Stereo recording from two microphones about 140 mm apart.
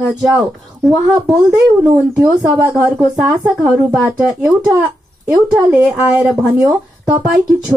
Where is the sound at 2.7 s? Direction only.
20° right (ahead or behind).